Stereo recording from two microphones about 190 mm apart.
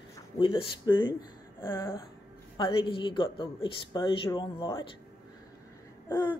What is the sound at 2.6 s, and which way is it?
Speech, 25° left (ahead or behind).